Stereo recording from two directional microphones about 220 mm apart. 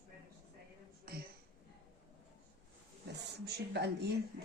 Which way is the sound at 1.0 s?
45° right (ahead or behind).